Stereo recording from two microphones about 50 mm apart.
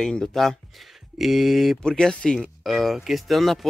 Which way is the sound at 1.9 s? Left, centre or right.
Centre.